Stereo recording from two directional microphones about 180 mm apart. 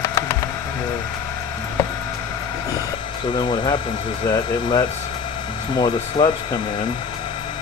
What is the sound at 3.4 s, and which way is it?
Speech, 25° left (ahead or behind).